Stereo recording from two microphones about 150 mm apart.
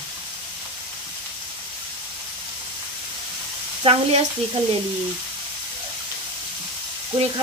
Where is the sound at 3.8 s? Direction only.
40° right (ahead or behind).